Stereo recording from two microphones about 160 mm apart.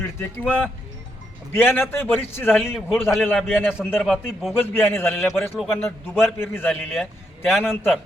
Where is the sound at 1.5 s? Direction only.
15° left (ahead or behind).